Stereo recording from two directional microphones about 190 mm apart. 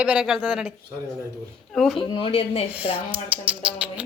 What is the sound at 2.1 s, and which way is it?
Speech, 30° left (ahead or behind).